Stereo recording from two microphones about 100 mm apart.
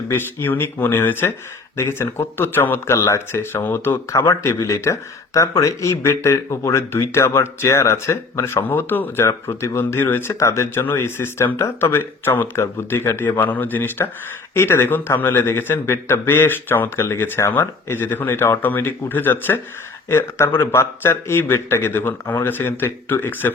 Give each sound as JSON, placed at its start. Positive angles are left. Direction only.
{"t": 0.1, "sound": "speech", "side_deg": 20}
{"t": 4.1, "sound": "speech", "side_deg": 30}